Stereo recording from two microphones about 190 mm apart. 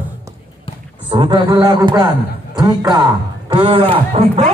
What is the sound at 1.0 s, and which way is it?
A man's voice, 25° right (ahead or behind).